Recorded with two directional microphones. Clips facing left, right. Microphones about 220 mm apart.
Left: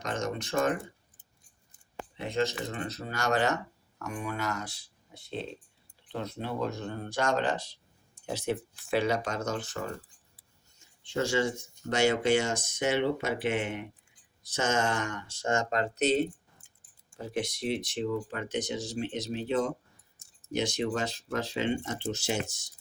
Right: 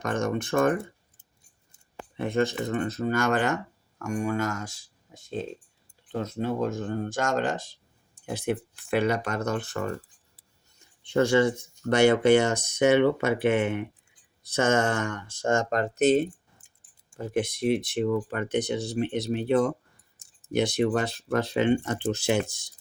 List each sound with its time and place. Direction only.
0.0 s speech: 55° right (ahead or behind)
2.1 s speech: 55° right (ahead or behind)